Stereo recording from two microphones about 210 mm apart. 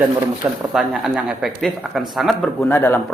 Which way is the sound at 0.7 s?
Centre (ahead or behind).